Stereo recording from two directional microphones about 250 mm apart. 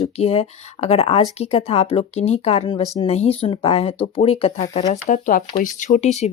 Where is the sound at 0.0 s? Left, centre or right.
Left.